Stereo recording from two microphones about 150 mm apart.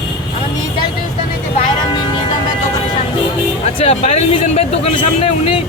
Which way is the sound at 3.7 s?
45° left (ahead or behind).